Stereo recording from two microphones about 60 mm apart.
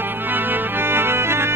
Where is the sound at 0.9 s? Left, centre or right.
Right.